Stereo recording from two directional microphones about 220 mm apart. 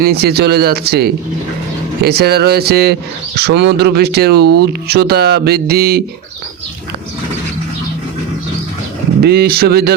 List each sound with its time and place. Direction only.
0.0 s speech: 45° right (ahead or behind)
9.2 s speech: 45° right (ahead or behind)